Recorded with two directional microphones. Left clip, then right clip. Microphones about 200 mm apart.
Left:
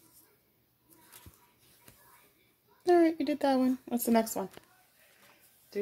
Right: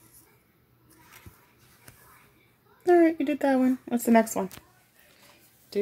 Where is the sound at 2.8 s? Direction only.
10° right (ahead or behind).